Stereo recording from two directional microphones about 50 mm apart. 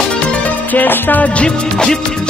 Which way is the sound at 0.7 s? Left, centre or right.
Left.